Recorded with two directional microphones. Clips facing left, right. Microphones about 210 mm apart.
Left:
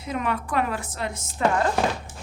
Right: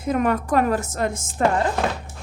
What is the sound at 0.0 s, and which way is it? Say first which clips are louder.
A woman's voice: right 7 dB; 50° right (ahead or behind).